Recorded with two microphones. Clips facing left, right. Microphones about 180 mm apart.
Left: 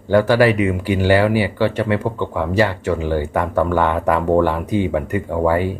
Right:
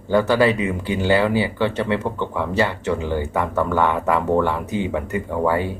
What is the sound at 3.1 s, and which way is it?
Speech, 20° right (ahead or behind).